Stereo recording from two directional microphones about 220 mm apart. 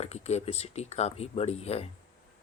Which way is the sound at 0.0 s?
30° left (ahead or behind).